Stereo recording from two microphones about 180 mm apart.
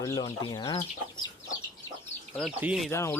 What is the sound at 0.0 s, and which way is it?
Speech, 20° left (ahead or behind).